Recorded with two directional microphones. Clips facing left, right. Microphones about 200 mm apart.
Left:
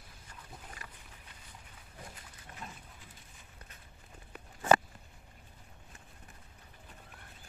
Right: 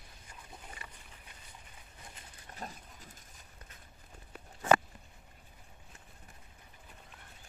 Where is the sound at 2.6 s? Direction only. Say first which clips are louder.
Right 4 dB; 40° right (ahead or behind).